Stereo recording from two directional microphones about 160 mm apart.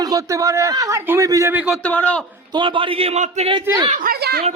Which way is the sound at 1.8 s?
10° left (ahead or behind).